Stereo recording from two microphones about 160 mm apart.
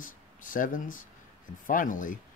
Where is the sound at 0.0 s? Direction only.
60° left (ahead or behind).